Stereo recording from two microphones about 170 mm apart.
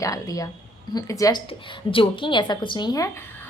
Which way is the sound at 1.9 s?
30° left (ahead or behind).